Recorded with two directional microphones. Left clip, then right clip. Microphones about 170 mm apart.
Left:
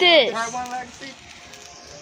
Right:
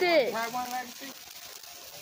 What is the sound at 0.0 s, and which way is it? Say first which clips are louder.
Speech: left 9 dB; 10° left (ahead or behind).